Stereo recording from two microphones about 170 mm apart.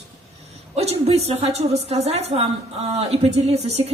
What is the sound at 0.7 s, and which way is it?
A woman's voice, 40° right (ahead or behind).